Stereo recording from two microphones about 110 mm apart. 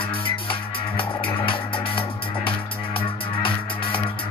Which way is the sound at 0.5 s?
50° left (ahead or behind).